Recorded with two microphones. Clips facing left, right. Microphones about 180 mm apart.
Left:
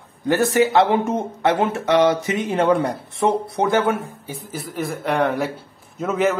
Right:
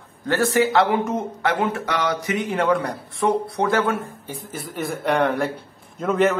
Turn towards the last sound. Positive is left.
turn(degrees=0)  # may be behind; listen again after turning